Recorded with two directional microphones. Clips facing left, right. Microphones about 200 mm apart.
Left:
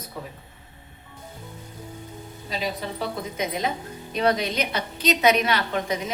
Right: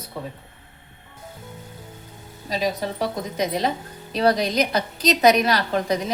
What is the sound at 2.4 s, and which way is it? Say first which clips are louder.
A woman's voice: right 5 dB; 40° right (ahead or behind).